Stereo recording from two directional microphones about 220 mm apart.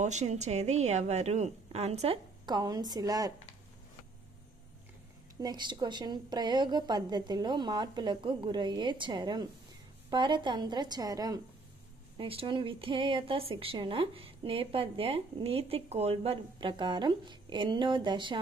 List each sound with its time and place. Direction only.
0.0 s a woman's voice: 30° right (ahead or behind); by 3.3 s 15° right (ahead or behind)
5.4 s a woman's voice: 20° right (ahead or behind)